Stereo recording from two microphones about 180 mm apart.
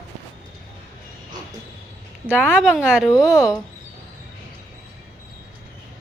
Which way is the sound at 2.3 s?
5° right (ahead or behind).